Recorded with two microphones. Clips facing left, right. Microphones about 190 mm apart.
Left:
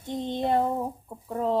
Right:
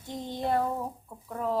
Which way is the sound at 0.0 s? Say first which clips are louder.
Left 4 dB; 20° left (ahead or behind).